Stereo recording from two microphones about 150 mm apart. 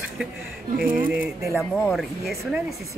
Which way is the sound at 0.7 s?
70° right (ahead or behind).